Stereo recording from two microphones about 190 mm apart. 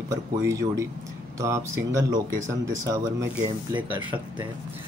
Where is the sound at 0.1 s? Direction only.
15° right (ahead or behind).